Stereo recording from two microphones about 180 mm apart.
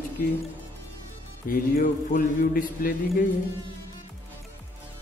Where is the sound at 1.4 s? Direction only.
50° left (ahead or behind).